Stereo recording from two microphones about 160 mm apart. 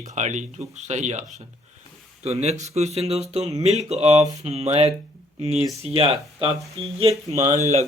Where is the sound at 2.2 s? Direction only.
40° right (ahead or behind).